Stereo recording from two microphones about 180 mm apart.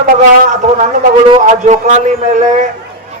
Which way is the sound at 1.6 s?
40° right (ahead or behind).